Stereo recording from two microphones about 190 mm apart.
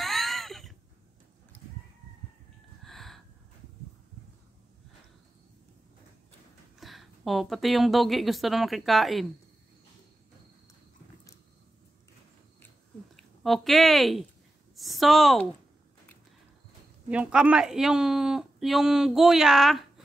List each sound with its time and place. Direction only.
0.0 s cat: centre (ahead or behind)
2.8 s a sound: centre (ahead or behind)
6.8 s a woman's voice: centre (ahead or behind)
13.1 s speech: centre (ahead or behind)
17.1 s speech: 5° right (ahead or behind)